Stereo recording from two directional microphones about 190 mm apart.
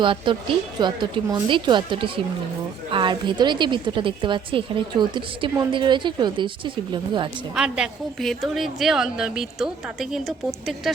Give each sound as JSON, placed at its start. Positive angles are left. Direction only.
{"t": 0.0, "sound": "a woman's voice", "side_deg": -25}
{"t": 7.5, "sound": "a woman's voice", "side_deg": -5}